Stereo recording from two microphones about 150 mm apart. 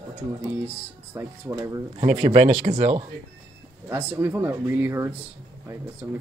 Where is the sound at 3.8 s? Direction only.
15° right (ahead or behind).